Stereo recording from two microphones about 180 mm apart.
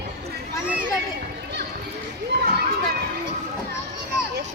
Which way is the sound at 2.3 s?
65° right (ahead or behind).